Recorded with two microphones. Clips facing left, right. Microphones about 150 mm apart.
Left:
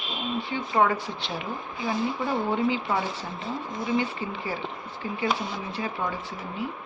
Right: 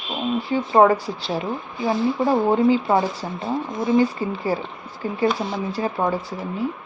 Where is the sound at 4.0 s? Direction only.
40° right (ahead or behind).